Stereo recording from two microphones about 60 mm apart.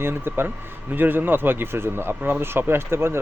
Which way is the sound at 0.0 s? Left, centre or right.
Right.